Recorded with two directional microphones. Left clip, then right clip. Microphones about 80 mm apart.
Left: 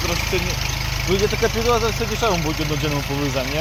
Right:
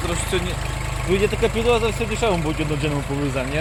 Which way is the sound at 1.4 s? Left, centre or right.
Centre.